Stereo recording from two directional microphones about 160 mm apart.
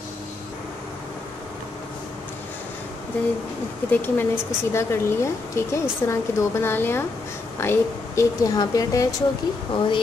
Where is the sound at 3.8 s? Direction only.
15° left (ahead or behind).